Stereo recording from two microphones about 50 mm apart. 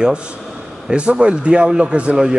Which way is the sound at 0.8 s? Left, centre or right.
Centre.